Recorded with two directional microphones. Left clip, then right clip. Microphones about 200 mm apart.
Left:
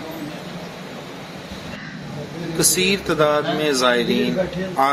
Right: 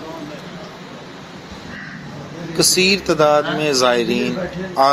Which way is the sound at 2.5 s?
15° right (ahead or behind).